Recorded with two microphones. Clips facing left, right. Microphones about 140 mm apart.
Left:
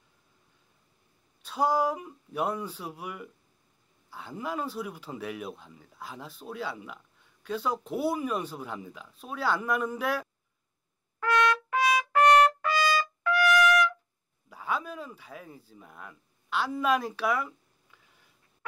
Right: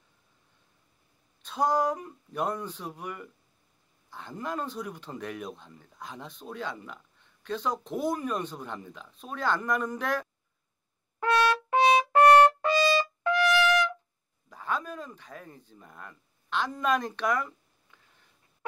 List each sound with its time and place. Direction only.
1.4 s speech: 10° left (ahead or behind)
11.1 s trumpet: 25° right (ahead or behind)
14.5 s speech: 10° left (ahead or behind)